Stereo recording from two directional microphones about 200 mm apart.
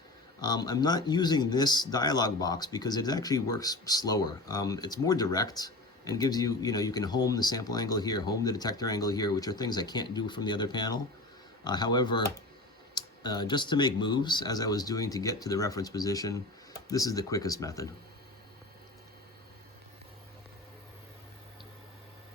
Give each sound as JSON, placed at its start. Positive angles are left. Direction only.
{"t": 0.4, "sound": "speech", "side_deg": 20}